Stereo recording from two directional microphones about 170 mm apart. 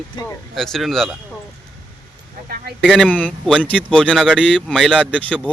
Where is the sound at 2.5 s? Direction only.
55° right (ahead or behind).